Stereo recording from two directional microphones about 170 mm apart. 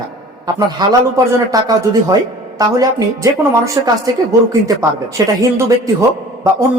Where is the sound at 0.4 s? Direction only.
20° right (ahead or behind).